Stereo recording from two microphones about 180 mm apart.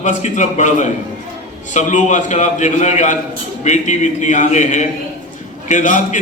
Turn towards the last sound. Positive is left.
turn(degrees=45)  # may be behind; listen again after turning